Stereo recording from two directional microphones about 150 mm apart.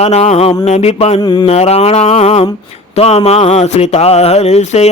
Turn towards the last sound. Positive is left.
turn(degrees=50)  # may be behind; listen again after turning